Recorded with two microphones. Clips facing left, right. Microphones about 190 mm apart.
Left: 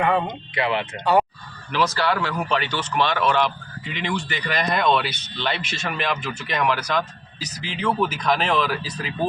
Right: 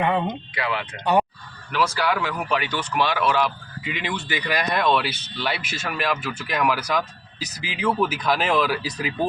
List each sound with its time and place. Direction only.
0.5 s speech: 25° left (ahead or behind)
1.7 s speech: 10° right (ahead or behind)